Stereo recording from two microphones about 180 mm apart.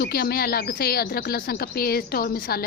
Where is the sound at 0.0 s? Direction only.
60° left (ahead or behind).